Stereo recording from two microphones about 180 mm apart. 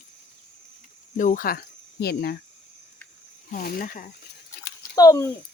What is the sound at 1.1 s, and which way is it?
Speech, 45° left (ahead or behind).